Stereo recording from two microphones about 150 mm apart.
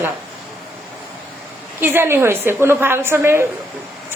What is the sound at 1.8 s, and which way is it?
A woman's voice, 15° right (ahead or behind).